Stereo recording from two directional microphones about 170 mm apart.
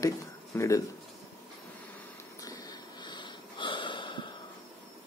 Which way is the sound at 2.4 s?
20° left (ahead or behind).